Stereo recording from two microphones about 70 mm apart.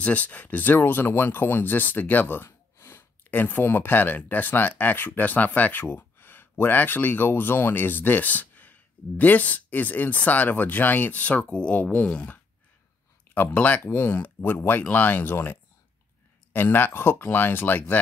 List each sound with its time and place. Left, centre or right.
0.0 s speech: left